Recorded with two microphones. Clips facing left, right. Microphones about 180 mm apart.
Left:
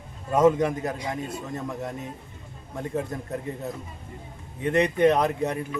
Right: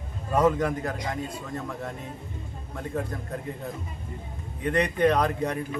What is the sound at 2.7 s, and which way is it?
Speech, 20° left (ahead or behind).